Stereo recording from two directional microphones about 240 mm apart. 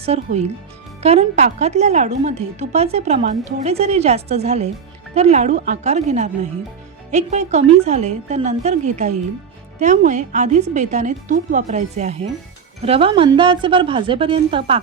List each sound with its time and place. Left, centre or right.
0.0 s a woman's voice: right